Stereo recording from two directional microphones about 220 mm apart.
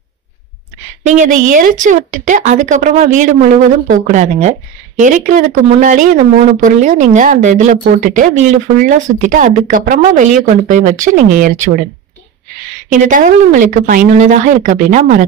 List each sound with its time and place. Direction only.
1.0 s speech: 35° right (ahead or behind)
12.9 s speech: 35° right (ahead or behind)